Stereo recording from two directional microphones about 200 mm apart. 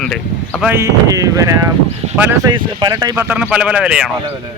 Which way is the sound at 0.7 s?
15° right (ahead or behind).